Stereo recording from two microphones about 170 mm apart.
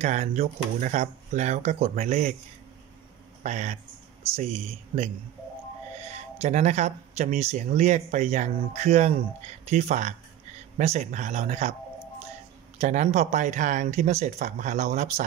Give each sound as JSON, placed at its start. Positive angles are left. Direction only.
{"t": 0.0, "sound": "speech", "side_deg": -45}
{"t": 3.4, "sound": "speech", "side_deg": -45}
{"t": 12.7, "sound": "speech", "side_deg": -45}